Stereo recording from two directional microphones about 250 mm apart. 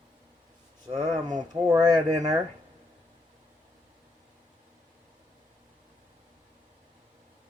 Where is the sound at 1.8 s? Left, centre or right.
Centre.